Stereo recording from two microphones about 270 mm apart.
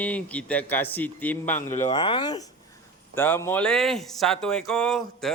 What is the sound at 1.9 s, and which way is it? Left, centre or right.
Speech, centre.